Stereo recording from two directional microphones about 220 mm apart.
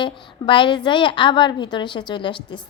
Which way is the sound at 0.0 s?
20° left (ahead or behind).